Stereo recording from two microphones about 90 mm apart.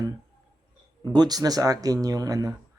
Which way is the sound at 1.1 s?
50° right (ahead or behind).